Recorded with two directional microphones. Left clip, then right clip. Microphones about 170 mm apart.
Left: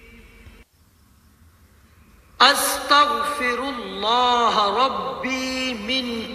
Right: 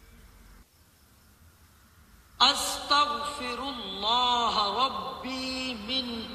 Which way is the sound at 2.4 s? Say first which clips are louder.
Left 8 dB; 45° left (ahead or behind).